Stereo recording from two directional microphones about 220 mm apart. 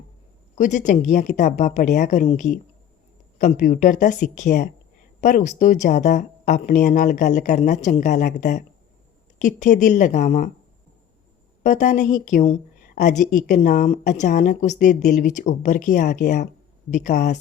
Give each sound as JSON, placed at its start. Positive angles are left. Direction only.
{"t": 0.5, "sound": "a woman's voice", "side_deg": 35}
{"t": 11.6, "sound": "a woman's voice", "side_deg": 35}